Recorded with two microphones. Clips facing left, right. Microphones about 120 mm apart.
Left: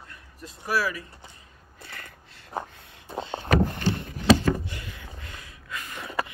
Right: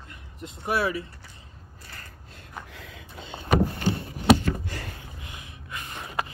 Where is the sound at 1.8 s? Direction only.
35° right (ahead or behind).